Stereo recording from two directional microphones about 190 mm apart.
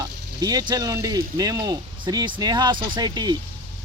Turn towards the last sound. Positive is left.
turn(degrees=-20)  # may be behind; listen again after turning